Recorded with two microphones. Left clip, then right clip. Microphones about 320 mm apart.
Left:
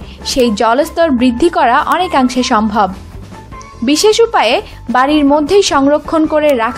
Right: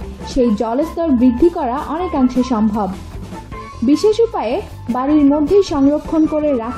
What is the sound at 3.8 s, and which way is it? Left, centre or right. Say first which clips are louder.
Speech: left 4 dB; left.